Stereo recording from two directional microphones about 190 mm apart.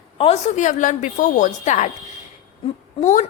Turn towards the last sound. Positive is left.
turn(degrees=40)  # may be behind; listen again after turning